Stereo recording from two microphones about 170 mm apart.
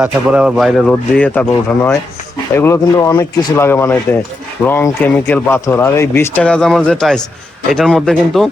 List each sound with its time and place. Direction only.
0.0 s speech: 5° right (ahead or behind)
0.9 s speech: 5° left (ahead or behind)